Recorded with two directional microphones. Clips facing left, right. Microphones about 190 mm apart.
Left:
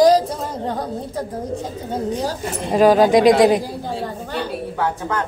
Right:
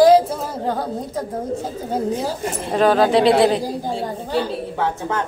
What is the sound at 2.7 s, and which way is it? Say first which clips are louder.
Speech: left 3 dB; 10° left (ahead or behind).